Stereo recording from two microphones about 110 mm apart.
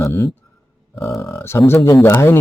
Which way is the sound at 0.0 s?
20° left (ahead or behind).